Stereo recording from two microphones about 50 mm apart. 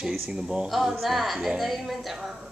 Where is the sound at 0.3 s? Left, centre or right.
Centre.